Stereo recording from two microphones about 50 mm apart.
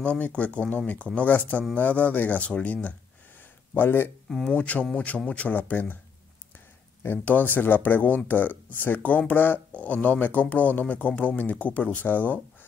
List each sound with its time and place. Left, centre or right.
0.0 s speech: left
3.7 s speech: left
4.3 s speech: centre
4.6 s speech: left
7.2 s speech: left